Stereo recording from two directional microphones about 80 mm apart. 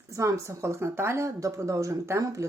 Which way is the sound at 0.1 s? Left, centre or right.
Right.